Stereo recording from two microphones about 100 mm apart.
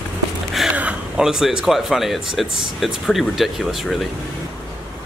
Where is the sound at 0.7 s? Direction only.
15° right (ahead or behind).